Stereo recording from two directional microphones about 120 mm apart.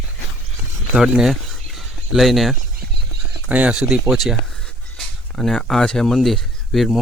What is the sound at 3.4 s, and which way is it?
Speech, 10° right (ahead or behind).